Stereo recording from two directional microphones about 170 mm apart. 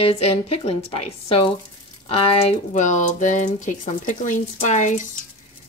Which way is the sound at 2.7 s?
45° left (ahead or behind).